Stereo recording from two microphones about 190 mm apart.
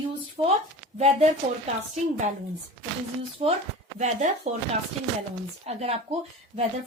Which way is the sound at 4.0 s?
35° right (ahead or behind).